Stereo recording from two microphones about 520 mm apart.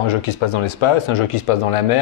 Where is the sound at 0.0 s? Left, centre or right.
Left.